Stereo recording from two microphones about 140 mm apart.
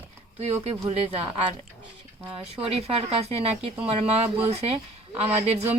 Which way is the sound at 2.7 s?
50° right (ahead or behind).